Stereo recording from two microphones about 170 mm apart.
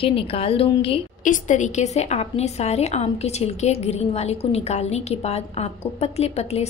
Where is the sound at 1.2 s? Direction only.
45° left (ahead or behind).